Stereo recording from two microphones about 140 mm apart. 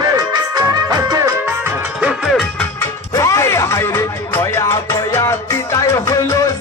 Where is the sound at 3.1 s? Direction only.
20° left (ahead or behind).